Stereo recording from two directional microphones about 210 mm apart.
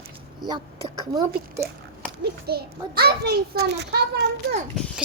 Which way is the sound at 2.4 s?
50° right (ahead or behind).